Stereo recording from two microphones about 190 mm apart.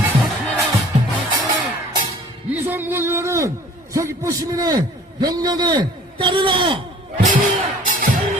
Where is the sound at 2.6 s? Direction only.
10° right (ahead or behind).